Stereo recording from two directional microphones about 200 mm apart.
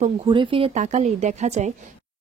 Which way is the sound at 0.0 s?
25° right (ahead or behind).